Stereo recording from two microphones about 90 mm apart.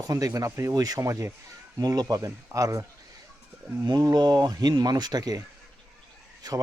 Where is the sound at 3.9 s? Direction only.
45° right (ahead or behind).